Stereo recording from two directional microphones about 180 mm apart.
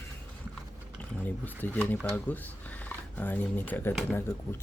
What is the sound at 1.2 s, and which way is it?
Speech, 10° left (ahead or behind).